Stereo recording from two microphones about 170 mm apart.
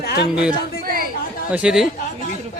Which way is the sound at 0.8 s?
60° right (ahead or behind).